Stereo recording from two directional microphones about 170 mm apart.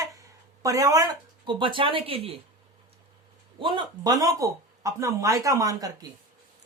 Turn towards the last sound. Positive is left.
turn(degrees=-20)  # may be behind; listen again after turning